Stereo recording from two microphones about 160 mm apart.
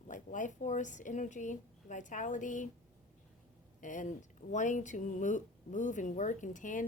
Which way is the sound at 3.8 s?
50° left (ahead or behind).